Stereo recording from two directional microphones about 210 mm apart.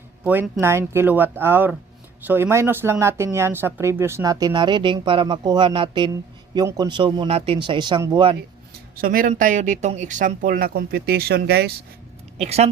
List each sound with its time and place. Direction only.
0.3 s speech: 10° right (ahead or behind)
9.0 s speech: 40° right (ahead or behind)
12.4 s speech: 30° right (ahead or behind)